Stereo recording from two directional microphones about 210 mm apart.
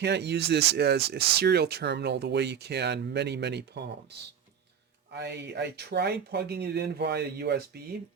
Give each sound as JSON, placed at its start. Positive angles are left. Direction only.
{"t": 0.0, "sound": "speech", "side_deg": -55}